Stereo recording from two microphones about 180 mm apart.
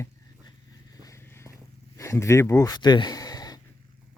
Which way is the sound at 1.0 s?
15° left (ahead or behind).